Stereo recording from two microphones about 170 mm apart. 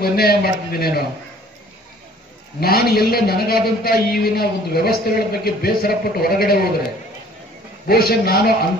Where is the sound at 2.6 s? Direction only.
65° left (ahead or behind).